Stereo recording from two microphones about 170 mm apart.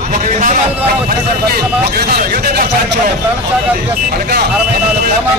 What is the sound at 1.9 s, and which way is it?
Speech, 60° right (ahead or behind).